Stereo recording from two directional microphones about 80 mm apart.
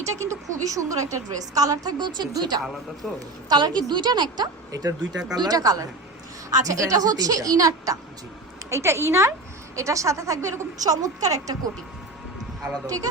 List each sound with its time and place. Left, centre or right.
0.0 s a woman's voice: right
3.0 s a woman's voice: centre
3.5 s a woman's voice: right
4.7 s a woman's voice: right
8.7 s a woman's voice: right